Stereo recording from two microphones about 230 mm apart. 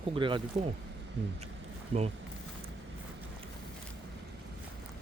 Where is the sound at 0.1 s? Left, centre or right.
Right.